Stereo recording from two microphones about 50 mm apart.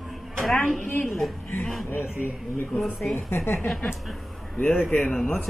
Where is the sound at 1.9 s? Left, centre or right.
Left.